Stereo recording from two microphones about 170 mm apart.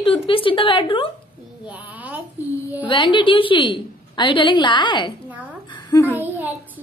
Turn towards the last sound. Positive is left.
turn(degrees=-10)  # may be behind; listen again after turning